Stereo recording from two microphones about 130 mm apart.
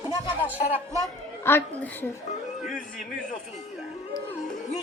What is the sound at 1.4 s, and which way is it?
Speech, 15° left (ahead or behind).